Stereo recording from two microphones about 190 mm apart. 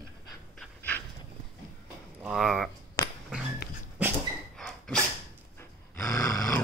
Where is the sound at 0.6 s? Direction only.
10° left (ahead or behind).